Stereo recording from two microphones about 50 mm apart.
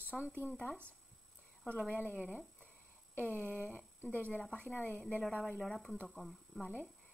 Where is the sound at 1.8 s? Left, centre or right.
Left.